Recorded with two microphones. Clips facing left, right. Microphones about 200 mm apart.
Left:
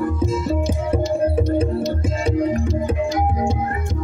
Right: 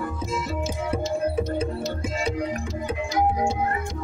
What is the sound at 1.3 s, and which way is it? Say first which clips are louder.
Music: left 6 dB; 50° left (ahead or behind).